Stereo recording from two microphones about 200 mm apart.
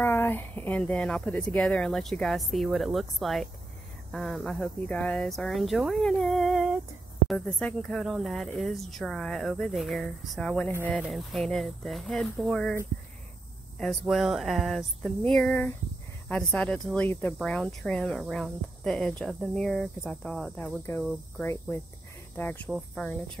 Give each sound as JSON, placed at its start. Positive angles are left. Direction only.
{"t": 0.0, "sound": "speech", "side_deg": 10}
{"t": 13.7, "sound": "speech", "side_deg": 0}